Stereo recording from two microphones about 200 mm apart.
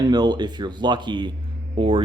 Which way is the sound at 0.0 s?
20° right (ahead or behind).